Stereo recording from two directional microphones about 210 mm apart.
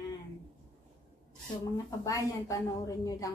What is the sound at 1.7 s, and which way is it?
A woman's voice, 15° left (ahead or behind).